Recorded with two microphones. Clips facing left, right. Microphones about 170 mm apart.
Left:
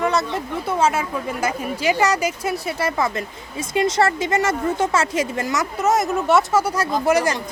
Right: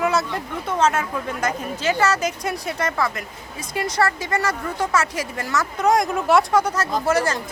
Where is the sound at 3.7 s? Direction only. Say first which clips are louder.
Left 4 dB; 25° left (ahead or behind).